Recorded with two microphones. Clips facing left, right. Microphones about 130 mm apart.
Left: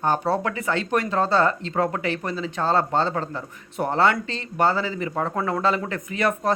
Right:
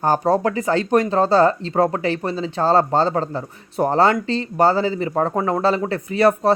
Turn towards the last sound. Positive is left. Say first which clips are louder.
# right 7 dB
turn(degrees=-30)  # may be behind; listen again after turning